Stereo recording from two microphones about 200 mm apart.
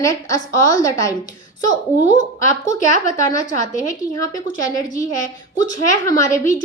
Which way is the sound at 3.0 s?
40° left (ahead or behind).